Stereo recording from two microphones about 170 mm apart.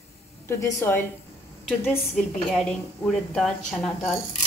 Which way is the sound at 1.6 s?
5° left (ahead or behind).